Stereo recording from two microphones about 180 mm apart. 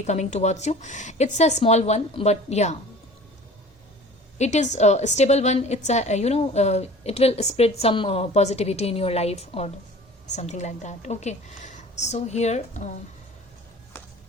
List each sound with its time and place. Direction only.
0.0 s a woman's voice: 40° left (ahead or behind)
4.4 s a woman's voice: 40° left (ahead or behind)